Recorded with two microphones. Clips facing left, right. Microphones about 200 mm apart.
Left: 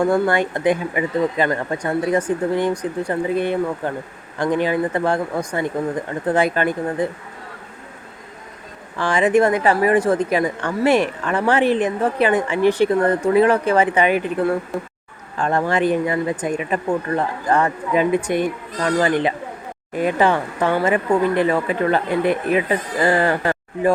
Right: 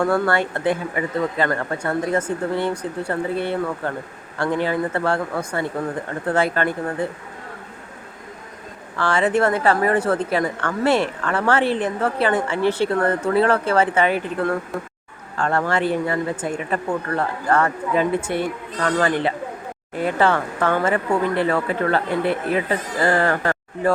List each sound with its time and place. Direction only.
0.0 s a woman's voice: 15° left (ahead or behind)
9.0 s a woman's voice: 15° left (ahead or behind)
14.7 s speech: centre (ahead or behind)
15.4 s a woman's voice: 15° left (ahead or behind)